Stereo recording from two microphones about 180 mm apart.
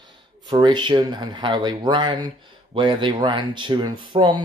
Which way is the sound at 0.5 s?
25° right (ahead or behind).